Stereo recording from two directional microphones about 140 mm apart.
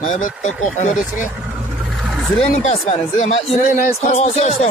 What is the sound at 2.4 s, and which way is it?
Speech, 45° left (ahead or behind).